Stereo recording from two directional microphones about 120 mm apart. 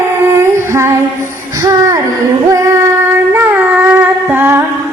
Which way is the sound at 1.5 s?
30° right (ahead or behind).